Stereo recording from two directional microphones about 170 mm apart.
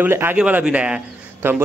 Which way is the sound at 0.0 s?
10° right (ahead or behind).